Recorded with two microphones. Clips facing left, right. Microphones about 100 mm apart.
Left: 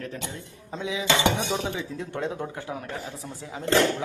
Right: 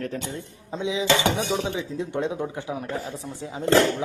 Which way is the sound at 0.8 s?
20° right (ahead or behind).